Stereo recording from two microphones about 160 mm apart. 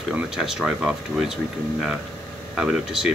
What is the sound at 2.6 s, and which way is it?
Speech, 5° right (ahead or behind).